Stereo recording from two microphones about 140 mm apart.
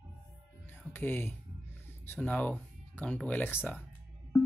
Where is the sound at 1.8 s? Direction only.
15° left (ahead or behind).